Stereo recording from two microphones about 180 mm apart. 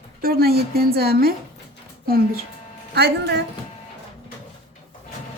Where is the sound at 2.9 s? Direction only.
65° right (ahead or behind).